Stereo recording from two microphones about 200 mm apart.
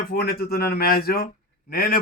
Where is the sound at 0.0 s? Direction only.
50° left (ahead or behind).